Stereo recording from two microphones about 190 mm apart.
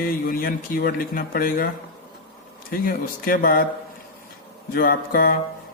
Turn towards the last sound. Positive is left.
turn(degrees=50)  # may be behind; listen again after turning